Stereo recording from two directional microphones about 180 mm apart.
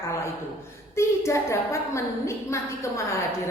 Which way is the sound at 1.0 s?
15° left (ahead or behind).